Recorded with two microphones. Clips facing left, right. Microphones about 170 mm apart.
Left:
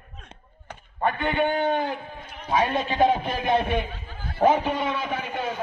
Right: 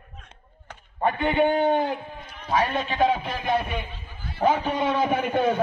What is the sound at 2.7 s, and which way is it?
Speech, 20° left (ahead or behind).